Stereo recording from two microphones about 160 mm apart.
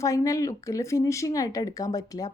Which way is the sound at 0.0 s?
20° left (ahead or behind).